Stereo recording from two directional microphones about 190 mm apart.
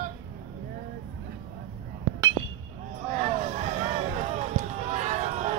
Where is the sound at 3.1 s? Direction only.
35° right (ahead or behind).